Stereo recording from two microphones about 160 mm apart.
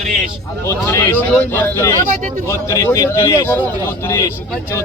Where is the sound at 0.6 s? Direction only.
20° left (ahead or behind).